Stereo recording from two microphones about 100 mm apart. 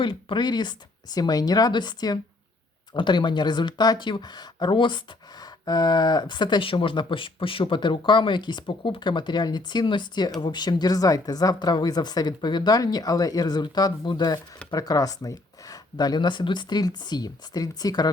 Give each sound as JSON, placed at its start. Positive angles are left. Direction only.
{"t": 0.0, "sound": "speech", "side_deg": 55}